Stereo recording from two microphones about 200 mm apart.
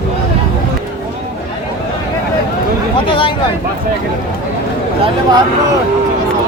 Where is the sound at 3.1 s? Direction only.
25° left (ahead or behind).